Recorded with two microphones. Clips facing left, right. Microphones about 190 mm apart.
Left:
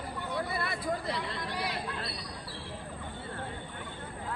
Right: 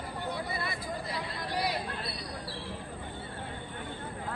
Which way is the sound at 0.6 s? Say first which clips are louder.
Left 3 dB; 60° left (ahead or behind).